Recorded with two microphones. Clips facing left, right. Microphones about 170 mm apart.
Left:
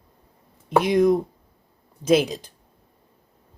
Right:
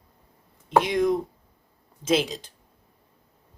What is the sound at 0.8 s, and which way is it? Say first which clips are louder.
Speech: left 5 dB; 45° left (ahead or behind).